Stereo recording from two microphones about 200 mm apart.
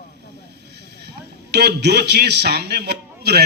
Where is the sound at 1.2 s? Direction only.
55° right (ahead or behind).